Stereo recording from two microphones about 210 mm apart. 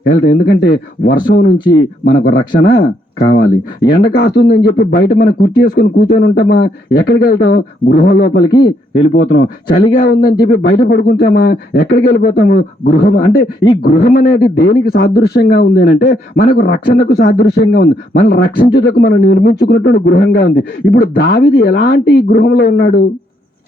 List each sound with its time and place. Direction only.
0.1 s a man's voice: 50° left (ahead or behind)
1.5 s speech: 25° left (ahead or behind)
2.0 s a man's voice: 50° left (ahead or behind)
9.1 s speech: 60° left (ahead or behind)
10.2 s a man's voice: 50° left (ahead or behind)